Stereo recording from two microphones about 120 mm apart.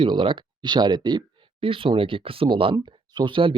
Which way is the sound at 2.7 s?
35° right (ahead or behind).